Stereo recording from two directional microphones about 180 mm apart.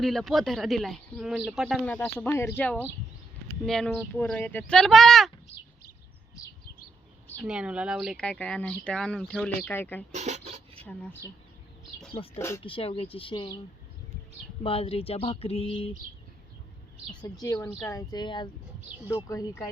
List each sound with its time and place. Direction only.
0.0 s speech: centre (ahead or behind)
1.9 s speech: 10° left (ahead or behind)
5.5 s speech: 35° left (ahead or behind)
7.3 s speech: 5° right (ahead or behind); by 10.0 s 10° left (ahead or behind)
10.1 s dishes: 40° right (ahead or behind)
12.4 s speech: 15° left (ahead or behind)
12.6 s speech: 30° left (ahead or behind)
14.6 s speech: 30° left (ahead or behind)
17.4 s speech: 20° left (ahead or behind)